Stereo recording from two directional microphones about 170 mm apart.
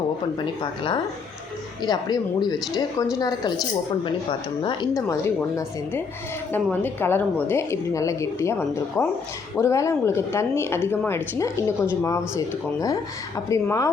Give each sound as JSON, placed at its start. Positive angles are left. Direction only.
{"t": 0.6, "sound": "speech", "side_deg": 25}
{"t": 13.5, "sound": "speech", "side_deg": 15}